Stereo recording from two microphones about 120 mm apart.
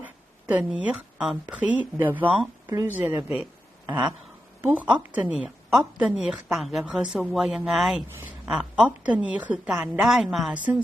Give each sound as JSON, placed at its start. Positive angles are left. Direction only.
{"t": 0.0, "sound": "a woman's voice", "side_deg": -15}
{"t": 4.6, "sound": "a woman's voice", "side_deg": -15}